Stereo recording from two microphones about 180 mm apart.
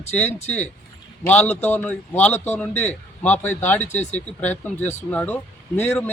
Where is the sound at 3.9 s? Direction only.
40° left (ahead or behind).